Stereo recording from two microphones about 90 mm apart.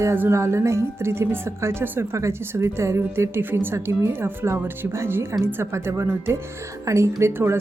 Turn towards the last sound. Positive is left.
turn(degrees=-30)  # may be behind; listen again after turning